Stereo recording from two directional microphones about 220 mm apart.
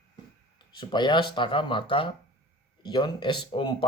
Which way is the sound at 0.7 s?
20° left (ahead or behind).